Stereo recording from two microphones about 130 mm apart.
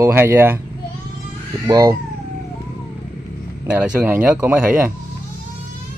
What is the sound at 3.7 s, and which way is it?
Speech, 10° right (ahead or behind).